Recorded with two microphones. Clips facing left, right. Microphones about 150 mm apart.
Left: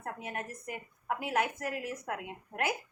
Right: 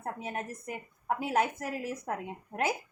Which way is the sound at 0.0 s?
30° right (ahead or behind).